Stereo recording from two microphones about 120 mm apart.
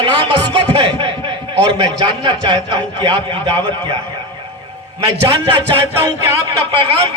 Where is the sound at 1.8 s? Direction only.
40° right (ahead or behind).